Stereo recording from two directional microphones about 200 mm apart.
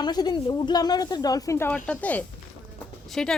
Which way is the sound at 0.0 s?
20° left (ahead or behind).